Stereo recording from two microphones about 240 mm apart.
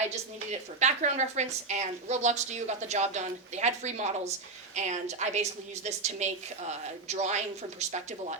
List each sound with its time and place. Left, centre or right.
0.8 s a woman's voice: right